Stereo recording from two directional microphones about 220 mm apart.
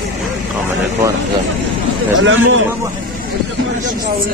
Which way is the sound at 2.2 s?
60° right (ahead or behind).